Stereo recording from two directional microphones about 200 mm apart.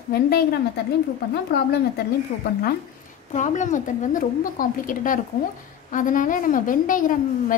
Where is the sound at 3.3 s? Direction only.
35° left (ahead or behind).